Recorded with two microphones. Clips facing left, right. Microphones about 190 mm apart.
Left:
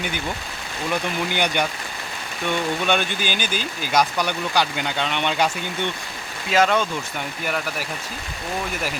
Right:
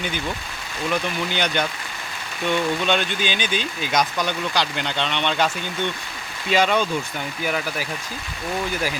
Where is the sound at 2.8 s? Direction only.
10° left (ahead or behind).